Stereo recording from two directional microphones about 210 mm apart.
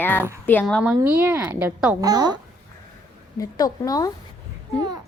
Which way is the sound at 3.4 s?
15° left (ahead or behind).